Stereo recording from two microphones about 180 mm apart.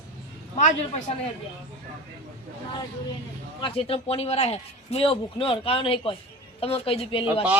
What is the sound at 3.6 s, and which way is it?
A man's voice, 30° left (ahead or behind).